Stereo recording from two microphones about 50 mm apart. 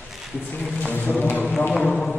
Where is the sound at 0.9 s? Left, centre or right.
Left.